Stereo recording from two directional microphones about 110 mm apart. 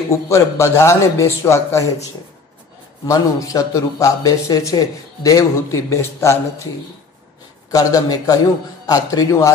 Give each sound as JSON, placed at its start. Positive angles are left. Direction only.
{"t": 0.1, "sound": "a man's voice", "side_deg": 25}
{"t": 3.1, "sound": "a man's voice", "side_deg": 30}
{"t": 7.7, "sound": "a man's voice", "side_deg": 35}